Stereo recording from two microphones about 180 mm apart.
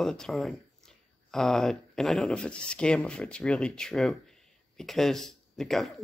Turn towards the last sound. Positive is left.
turn(degrees=0)  # may be behind; listen again after turning